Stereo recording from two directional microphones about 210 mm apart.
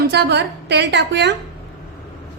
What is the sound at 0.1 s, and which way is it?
A woman's voice, 50° right (ahead or behind).